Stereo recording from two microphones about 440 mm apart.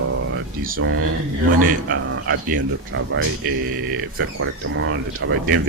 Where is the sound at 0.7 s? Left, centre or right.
Right.